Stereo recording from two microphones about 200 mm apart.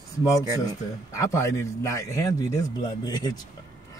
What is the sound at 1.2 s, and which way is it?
A man's voice, 15° left (ahead or behind).